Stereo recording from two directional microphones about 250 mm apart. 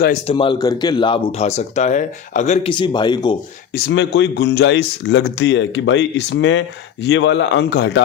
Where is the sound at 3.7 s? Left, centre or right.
Left.